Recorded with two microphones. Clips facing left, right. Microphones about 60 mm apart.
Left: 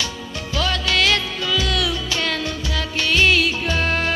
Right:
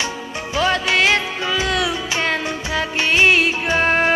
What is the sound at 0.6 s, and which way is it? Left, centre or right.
Music, right.